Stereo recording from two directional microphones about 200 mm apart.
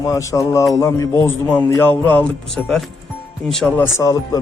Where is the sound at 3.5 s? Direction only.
5° left (ahead or behind).